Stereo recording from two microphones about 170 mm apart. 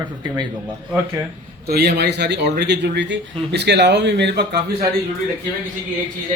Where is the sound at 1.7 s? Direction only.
75° right (ahead or behind); by 4.4 s 90° right.